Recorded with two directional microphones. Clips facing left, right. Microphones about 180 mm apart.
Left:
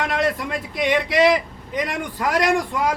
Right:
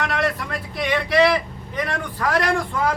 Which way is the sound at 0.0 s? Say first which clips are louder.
Left 2 dB; 20° left (ahead or behind).